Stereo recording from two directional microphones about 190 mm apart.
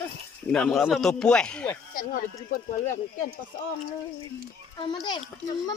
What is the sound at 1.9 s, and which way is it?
Speech, 45° left (ahead or behind).